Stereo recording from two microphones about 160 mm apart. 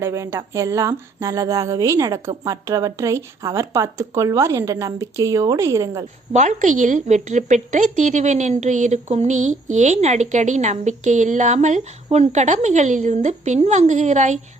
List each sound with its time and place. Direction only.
0.0 s speech: 20° right (ahead or behind)
6.3 s a woman's voice: 50° right (ahead or behind)